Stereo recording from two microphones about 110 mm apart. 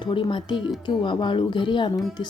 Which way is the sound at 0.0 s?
50° left (ahead or behind).